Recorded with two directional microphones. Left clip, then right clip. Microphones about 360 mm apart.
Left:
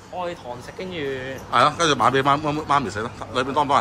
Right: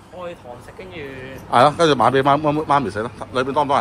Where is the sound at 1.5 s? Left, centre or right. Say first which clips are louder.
Right 4 dB; centre.